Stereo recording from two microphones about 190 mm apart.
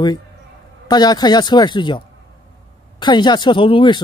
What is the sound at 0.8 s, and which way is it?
Speech, 20° left (ahead or behind).